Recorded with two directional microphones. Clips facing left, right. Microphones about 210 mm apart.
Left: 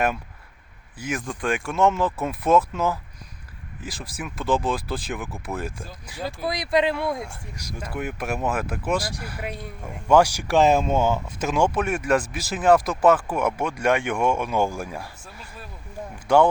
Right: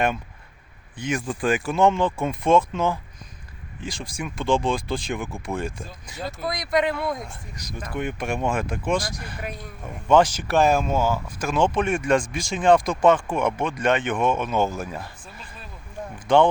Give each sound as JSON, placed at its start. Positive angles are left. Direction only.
{"t": 0.9, "sound": "speech", "side_deg": 5}
{"t": 1.3, "sound": "speech", "side_deg": -5}
{"t": 6.5, "sound": "speech", "side_deg": 30}
{"t": 6.9, "sound": "speech", "side_deg": 10}
{"t": 11.5, "sound": "speech", "side_deg": 10}